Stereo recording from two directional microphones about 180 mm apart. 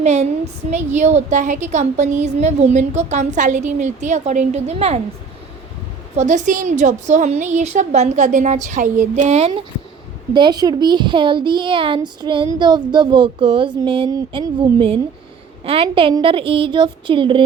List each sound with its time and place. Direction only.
0.0 s a woman's voice: 40° right (ahead or behind)
6.1 s a woman's voice: 40° right (ahead or behind)
10.3 s a woman's voice: 25° right (ahead or behind)